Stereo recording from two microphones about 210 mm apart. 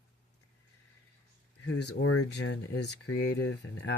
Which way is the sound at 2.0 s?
90° left.